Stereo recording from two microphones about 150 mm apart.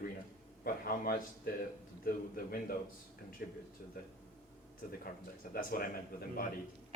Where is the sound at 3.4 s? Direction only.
90° left.